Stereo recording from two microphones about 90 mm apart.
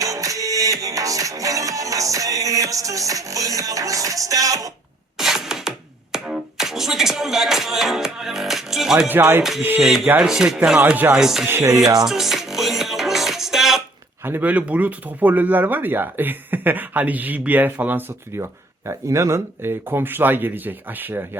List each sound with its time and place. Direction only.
0.0 s music: 40° right (ahead or behind)
5.1 s music: 5° right (ahead or behind)
9.4 s speech: 5° right (ahead or behind)
10.8 s speech: 20° right (ahead or behind)
11.1 s speech: 5° right (ahead or behind)
11.4 s speech: 25° right (ahead or behind)
12.0 s music: 5° right (ahead or behind)
14.3 s speech: 20° right (ahead or behind)
18.9 s speech: 35° right (ahead or behind)